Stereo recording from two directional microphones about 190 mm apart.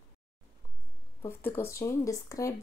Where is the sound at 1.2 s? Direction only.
10° left (ahead or behind).